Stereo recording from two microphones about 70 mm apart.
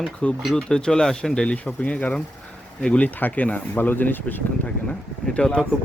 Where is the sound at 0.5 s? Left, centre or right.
Centre.